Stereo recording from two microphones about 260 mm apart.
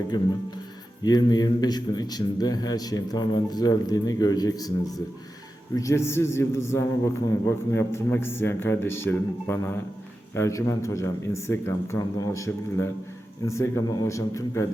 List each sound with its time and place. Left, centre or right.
1.0 s a man's voice: centre